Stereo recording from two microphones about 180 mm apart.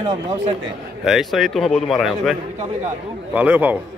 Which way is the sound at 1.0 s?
Centre (ahead or behind).